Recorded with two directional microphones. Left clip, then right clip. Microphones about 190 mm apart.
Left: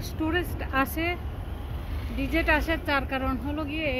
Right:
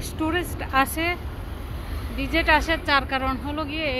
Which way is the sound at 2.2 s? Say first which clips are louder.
Right 5 dB; 15° left (ahead or behind).